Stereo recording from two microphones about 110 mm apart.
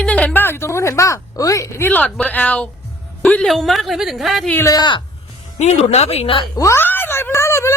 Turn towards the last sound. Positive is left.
turn(degrees=25)  # may be behind; listen again after turning